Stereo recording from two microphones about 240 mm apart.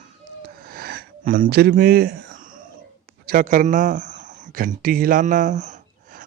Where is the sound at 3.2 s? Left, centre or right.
Right.